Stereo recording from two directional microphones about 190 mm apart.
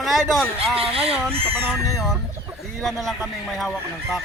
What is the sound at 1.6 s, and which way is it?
Fowl, centre (ahead or behind).